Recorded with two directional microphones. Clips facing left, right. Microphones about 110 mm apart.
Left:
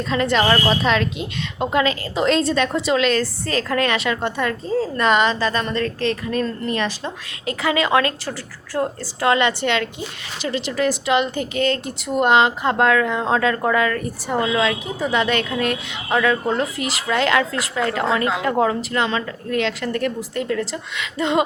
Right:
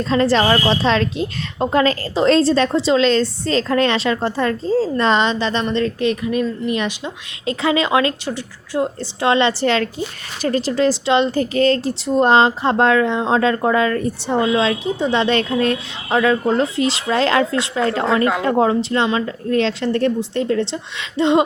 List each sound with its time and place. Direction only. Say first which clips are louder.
0.0 s a woman's voice: right 3 dB; 35° right (ahead or behind)